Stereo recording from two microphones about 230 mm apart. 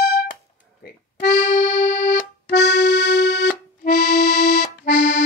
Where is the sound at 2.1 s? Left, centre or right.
Left.